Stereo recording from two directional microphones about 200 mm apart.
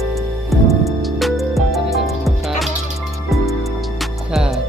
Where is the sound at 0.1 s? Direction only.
Centre (ahead or behind).